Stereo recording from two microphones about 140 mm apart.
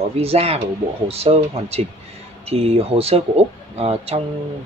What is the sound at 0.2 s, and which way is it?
Speech, 45° right (ahead or behind).